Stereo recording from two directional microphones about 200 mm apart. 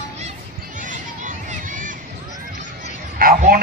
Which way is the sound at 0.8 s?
40° right (ahead or behind).